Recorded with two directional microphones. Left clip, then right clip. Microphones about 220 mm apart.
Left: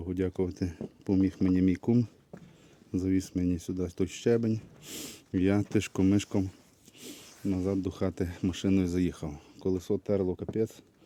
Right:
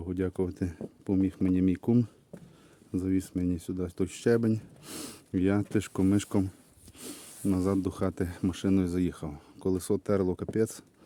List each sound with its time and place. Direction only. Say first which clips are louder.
0.0 s speech: even; centre (ahead or behind)
5.3 s speech: even; centre (ahead or behind)
7.0 s speech: right 2 dB; 20° right (ahead or behind)